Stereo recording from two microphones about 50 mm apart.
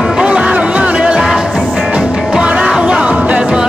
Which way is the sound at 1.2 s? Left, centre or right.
Centre.